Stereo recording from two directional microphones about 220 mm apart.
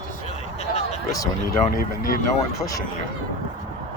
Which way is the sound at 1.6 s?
40° left (ahead or behind).